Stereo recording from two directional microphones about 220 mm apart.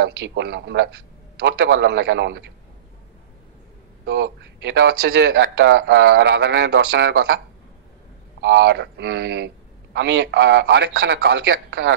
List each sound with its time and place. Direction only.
0.0 s speech: 50° right (ahead or behind)
4.0 s speech: 50° right (ahead or behind)
8.4 s speech: 55° right (ahead or behind)